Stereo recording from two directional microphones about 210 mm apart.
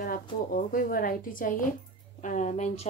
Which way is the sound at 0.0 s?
40° left (ahead or behind).